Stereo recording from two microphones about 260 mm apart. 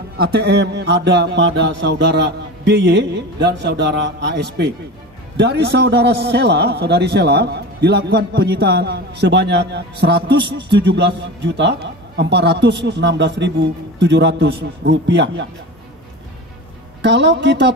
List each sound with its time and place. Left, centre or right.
0.2 s a man's voice: right
17.0 s a man's voice: right